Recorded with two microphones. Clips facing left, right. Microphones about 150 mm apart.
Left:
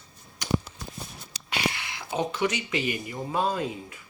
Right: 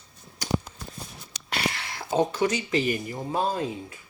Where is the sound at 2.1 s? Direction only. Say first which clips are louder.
Right 4 dB; 35° right (ahead or behind).